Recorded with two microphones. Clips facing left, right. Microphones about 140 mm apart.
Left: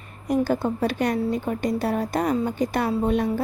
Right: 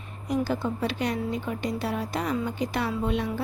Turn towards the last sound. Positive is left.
turn(degrees=45)  # may be behind; listen again after turning